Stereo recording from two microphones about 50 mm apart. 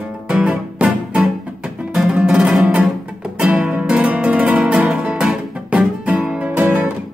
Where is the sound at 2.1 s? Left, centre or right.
Centre.